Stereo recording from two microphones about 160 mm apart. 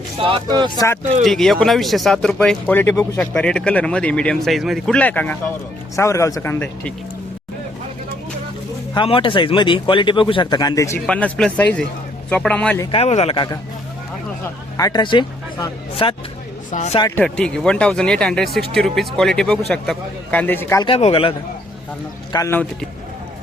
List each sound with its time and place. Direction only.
0.2 s speech: 30° right (ahead or behind)
1.2 s speech: centre (ahead or behind)
9.0 s speech: 35° left (ahead or behind)
11.0 s speech: 5° left (ahead or behind)
12.9 s speech: 40° left (ahead or behind)
14.8 s speech: 25° left (ahead or behind)
16.7 s speech: 45° left (ahead or behind)
17.2 s speech: 5° left (ahead or behind)
20.8 s speech: 35° left (ahead or behind)
22.3 s speech: 20° left (ahead or behind)